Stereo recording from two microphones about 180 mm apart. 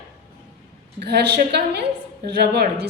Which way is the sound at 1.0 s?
65° right (ahead or behind).